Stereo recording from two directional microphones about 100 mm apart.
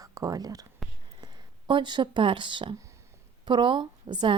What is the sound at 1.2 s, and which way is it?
A woman's voice, 50° right (ahead or behind).